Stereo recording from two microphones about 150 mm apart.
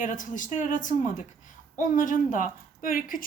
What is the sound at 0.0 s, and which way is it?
A woman's voice, 60° left (ahead or behind).